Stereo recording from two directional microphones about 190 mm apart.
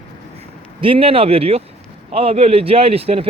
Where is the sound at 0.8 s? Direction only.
30° right (ahead or behind).